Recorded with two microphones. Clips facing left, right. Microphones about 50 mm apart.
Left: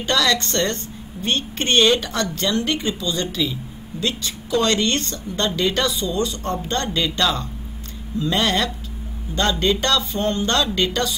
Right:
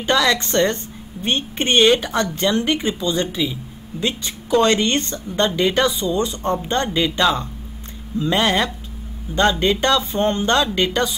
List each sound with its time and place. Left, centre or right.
0.0 s a woman's voice: centre